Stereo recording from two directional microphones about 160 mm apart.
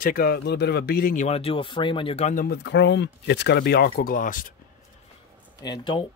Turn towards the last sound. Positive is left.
turn(degrees=30)  # may be behind; listen again after turning